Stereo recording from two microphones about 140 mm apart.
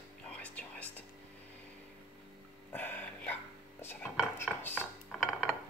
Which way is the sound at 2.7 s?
15° left (ahead or behind).